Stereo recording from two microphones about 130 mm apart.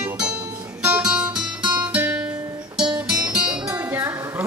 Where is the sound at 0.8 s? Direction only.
10° right (ahead or behind).